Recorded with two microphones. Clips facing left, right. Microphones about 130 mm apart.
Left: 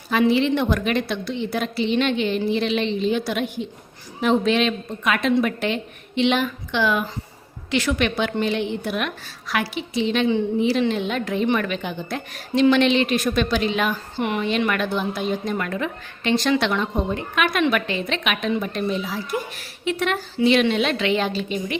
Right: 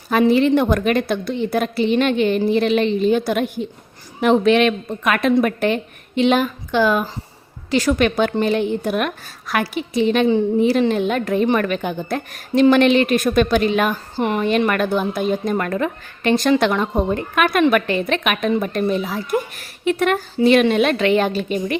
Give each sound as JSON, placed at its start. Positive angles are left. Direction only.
{"t": 0.1, "sound": "a woman's voice", "side_deg": -45}
{"t": 4.2, "sound": "a woman's voice", "side_deg": -60}